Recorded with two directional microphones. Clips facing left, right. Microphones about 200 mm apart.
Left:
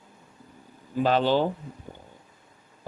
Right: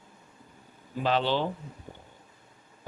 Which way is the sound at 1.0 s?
45° left (ahead or behind).